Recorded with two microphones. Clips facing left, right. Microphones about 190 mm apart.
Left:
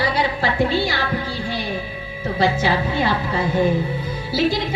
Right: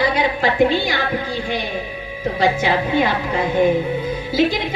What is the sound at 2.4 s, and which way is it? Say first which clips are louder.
A woman's voice: right 1 dB; 15° right (ahead or behind).